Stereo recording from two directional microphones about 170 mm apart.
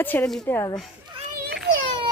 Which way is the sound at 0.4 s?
20° left (ahead or behind).